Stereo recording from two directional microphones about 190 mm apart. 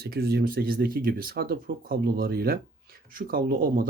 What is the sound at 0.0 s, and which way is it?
Speech, 55° right (ahead or behind).